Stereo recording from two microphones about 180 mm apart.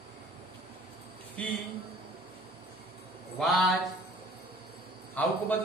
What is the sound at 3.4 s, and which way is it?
Speech, centre (ahead or behind).